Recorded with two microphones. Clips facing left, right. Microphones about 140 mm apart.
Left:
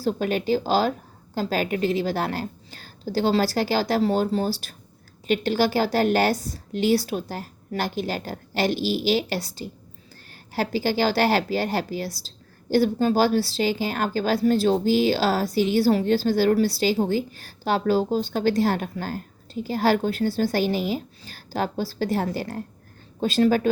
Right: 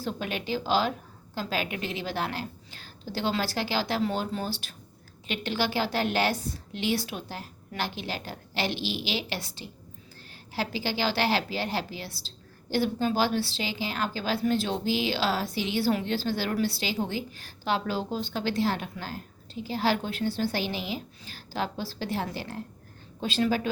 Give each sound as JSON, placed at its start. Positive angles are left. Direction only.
{"t": 0.0, "sound": "a woman's voice", "side_deg": 40}